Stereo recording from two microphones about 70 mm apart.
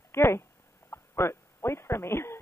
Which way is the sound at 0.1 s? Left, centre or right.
Left.